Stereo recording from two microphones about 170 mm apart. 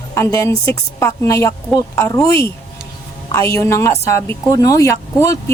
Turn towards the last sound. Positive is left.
turn(degrees=15)  # may be behind; listen again after turning